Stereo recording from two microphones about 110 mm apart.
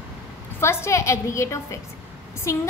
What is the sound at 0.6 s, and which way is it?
A woman's voice, 25° left (ahead or behind).